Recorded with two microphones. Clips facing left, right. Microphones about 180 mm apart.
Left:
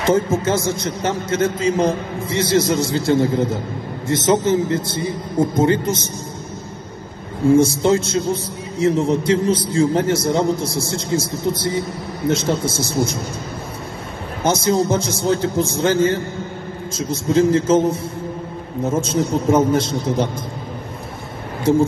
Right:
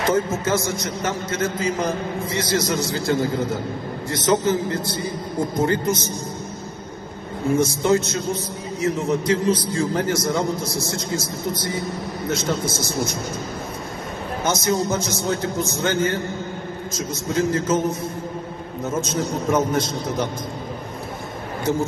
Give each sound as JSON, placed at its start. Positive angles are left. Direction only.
{"t": 0.0, "sound": "a man's voice", "side_deg": 30}
{"t": 7.4, "sound": "a man's voice", "side_deg": 30}
{"t": 14.4, "sound": "a man's voice", "side_deg": 30}